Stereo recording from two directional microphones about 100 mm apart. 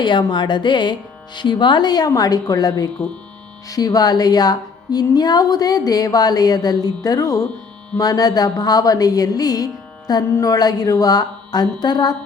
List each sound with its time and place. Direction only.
0.0 s speech: 50° left (ahead or behind)
1.4 s music: 50° left (ahead or behind)